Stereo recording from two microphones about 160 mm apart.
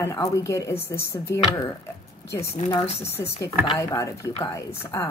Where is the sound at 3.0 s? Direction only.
15° left (ahead or behind).